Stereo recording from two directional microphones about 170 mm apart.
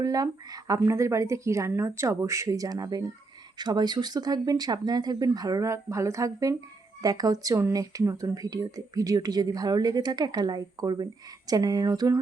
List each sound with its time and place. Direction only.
0.0 s speech: 20° right (ahead or behind)